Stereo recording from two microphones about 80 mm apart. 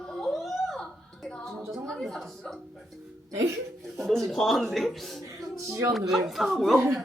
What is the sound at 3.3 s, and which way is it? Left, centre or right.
Speech, right.